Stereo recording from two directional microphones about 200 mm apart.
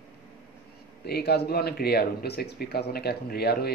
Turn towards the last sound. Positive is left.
turn(degrees=50)  # may be behind; listen again after turning